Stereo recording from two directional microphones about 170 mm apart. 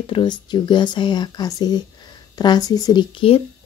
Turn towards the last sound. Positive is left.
turn(degrees=35)  # may be behind; listen again after turning